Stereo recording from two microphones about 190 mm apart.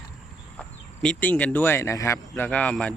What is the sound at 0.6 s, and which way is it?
Speech, 5° left (ahead or behind).